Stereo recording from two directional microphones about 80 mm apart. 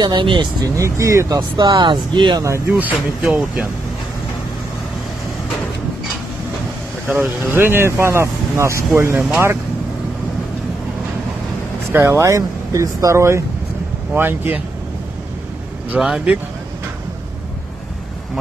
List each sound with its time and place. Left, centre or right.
0.0 s speech: right
0.7 s speech: right
1.7 s speech: right
2.7 s speech: right
7.1 s speech: right
12.0 s speech: right
15.9 s speech: centre